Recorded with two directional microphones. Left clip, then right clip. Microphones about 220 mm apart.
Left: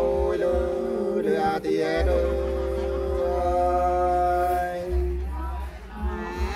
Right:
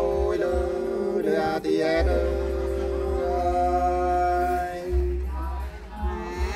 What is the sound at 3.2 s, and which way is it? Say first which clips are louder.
Music: left 1 dB; 5° right (ahead or behind).